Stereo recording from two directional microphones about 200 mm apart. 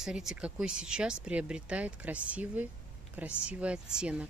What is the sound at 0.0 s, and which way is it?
Speech, centre (ahead or behind).